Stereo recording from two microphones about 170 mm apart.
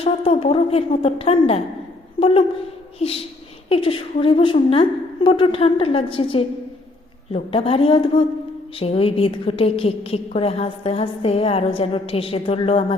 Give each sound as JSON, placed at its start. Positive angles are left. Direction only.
{"t": 0.0, "sound": "a woman's voice", "side_deg": 35}
{"t": 2.1, "sound": "a sound", "side_deg": 35}
{"t": 3.0, "sound": "a woman's voice", "side_deg": 35}